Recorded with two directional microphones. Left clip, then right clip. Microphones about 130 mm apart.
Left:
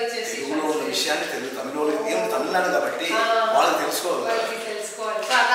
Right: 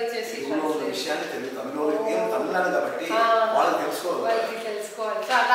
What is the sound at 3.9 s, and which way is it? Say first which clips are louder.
Speech: left 1 dB; 30° right (ahead or behind).